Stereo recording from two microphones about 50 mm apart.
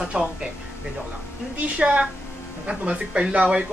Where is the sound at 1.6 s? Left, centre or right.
Right.